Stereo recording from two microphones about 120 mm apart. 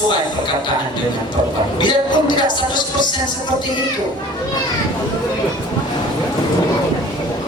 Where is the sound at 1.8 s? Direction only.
40° left (ahead or behind).